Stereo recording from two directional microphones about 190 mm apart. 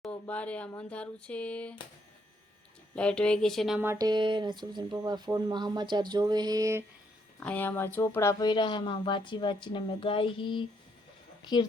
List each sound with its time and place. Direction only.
0.0 s speech: 5° left (ahead or behind)
2.9 s speech: 5° left (ahead or behind)
3.8 s speech: 20° right (ahead or behind)
7.3 s speech: 10° left (ahead or behind); by 10.7 s 25° left (ahead or behind)